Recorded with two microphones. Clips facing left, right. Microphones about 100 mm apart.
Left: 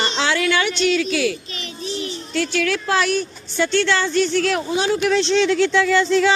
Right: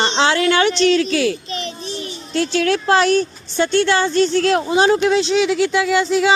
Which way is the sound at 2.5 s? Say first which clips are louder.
Right 5 dB; 25° right (ahead or behind).